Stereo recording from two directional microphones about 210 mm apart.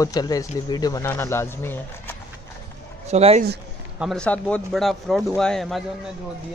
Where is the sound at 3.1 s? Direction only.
30° right (ahead or behind).